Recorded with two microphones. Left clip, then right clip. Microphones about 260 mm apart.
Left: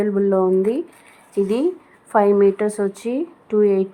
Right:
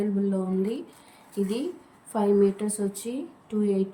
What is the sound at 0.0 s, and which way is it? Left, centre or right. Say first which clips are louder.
Speech: left 12 dB; left.